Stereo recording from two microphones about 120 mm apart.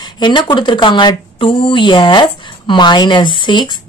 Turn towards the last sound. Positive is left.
turn(degrees=40)  # may be behind; listen again after turning